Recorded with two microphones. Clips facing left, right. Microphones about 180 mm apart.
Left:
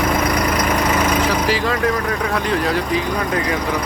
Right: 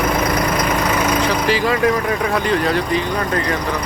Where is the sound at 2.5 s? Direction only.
5° left (ahead or behind).